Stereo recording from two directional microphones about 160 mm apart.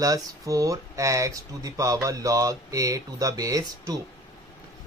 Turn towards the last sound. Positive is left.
turn(degrees=-20)  # may be behind; listen again after turning